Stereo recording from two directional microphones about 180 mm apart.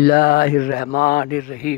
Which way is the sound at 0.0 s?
55° left (ahead or behind).